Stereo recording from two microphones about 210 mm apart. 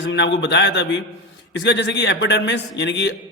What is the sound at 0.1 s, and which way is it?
A man's voice, 55° left (ahead or behind).